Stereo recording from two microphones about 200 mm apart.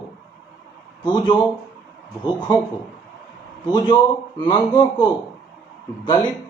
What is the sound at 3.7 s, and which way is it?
Speech, 20° left (ahead or behind).